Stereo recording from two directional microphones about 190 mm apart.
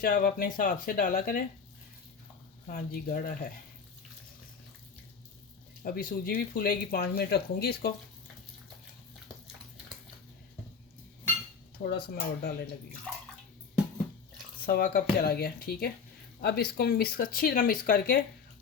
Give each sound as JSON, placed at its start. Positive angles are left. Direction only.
{"t": 0.0, "sound": "speech", "side_deg": 50}
{"t": 2.7, "sound": "speech", "side_deg": 50}
{"t": 5.8, "sound": "speech", "side_deg": 50}
{"t": 12.0, "sound": "speech", "side_deg": 55}
{"t": 14.7, "sound": "speech", "side_deg": 50}